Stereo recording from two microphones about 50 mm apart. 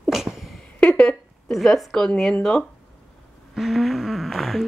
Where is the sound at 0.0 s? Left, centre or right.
Centre.